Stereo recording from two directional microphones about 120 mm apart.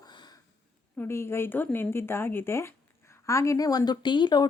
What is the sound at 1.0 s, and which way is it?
Speech, 20° left (ahead or behind).